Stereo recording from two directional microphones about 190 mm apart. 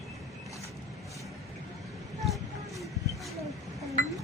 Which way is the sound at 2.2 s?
Centre (ahead or behind).